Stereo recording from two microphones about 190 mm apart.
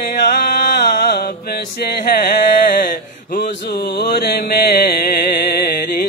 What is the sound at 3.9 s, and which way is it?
Mantra, 55° left (ahead or behind).